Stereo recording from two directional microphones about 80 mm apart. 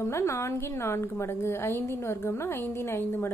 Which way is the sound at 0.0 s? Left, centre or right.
Left.